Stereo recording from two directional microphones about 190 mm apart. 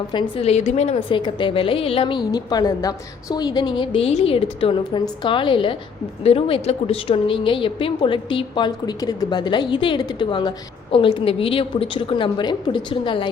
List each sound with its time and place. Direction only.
0.1 s a woman's voice: 25° left (ahead or behind)